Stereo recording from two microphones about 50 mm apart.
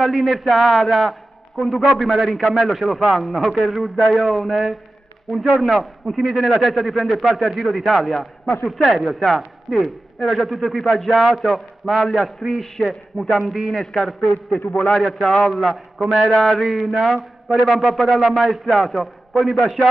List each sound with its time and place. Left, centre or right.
0.0 s a man's voice: centre